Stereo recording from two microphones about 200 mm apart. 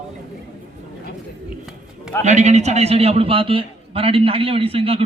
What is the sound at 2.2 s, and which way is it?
A man's voice, 35° right (ahead or behind).